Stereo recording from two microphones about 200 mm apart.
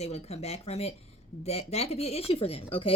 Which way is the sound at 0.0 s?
30° left (ahead or behind).